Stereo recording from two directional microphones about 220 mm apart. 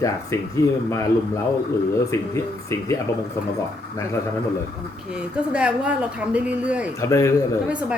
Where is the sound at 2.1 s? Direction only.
10° left (ahead or behind).